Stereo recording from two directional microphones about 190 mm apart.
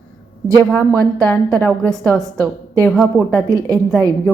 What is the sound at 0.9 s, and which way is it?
Speech, 20° right (ahead or behind).